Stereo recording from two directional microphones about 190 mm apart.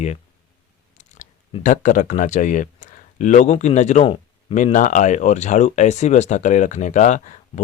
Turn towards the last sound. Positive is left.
turn(degrees=40)  # may be behind; listen again after turning